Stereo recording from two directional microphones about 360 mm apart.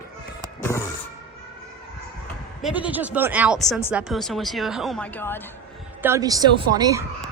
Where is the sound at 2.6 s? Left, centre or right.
Centre.